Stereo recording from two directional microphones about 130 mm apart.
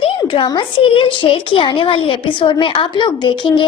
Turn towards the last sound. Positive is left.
turn(degrees=35)  # may be behind; listen again after turning